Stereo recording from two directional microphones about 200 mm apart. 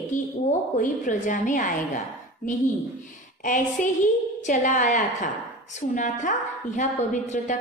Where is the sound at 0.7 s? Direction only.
40° left (ahead or behind).